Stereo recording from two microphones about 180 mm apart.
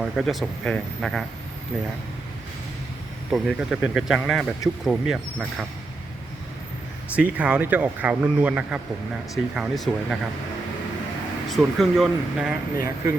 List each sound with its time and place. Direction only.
0.0 s speech: centre (ahead or behind)
3.3 s speech: centre (ahead or behind)
7.2 s a man's voice: 5° right (ahead or behind)
11.4 s speech: centre (ahead or behind)